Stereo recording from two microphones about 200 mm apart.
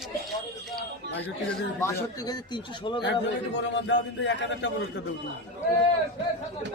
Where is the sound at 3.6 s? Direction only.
65° left (ahead or behind).